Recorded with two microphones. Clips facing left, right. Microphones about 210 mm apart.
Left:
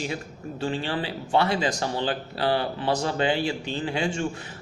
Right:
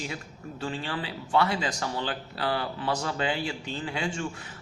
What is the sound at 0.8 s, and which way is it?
A man's voice, 25° left (ahead or behind).